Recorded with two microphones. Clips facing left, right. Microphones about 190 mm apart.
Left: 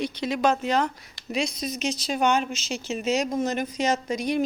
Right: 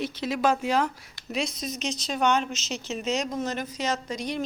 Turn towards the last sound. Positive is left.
turn(degrees=10)  # may be behind; listen again after turning